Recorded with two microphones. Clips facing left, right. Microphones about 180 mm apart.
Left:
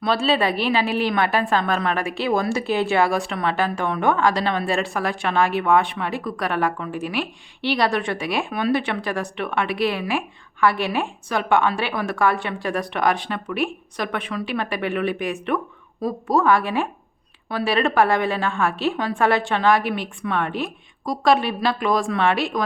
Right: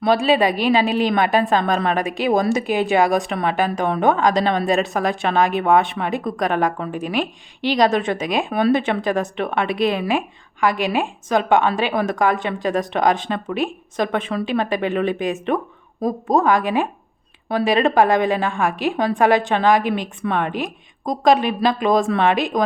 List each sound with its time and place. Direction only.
0.0 s a woman's voice: 15° right (ahead or behind)
8.4 s speech: 40° right (ahead or behind)
8.7 s a woman's voice: 20° right (ahead or behind)